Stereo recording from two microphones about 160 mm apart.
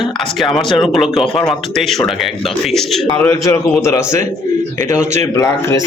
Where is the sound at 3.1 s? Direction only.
20° left (ahead or behind).